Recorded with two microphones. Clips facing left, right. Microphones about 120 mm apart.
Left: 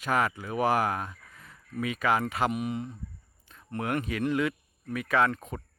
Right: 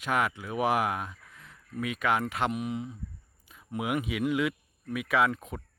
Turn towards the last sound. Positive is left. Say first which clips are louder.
# left 1 dB
turn(degrees=0)  # may be behind; listen again after turning